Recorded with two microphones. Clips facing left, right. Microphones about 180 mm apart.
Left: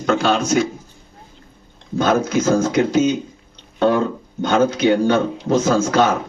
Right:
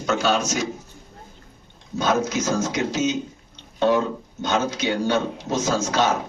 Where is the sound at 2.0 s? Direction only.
55° left (ahead or behind).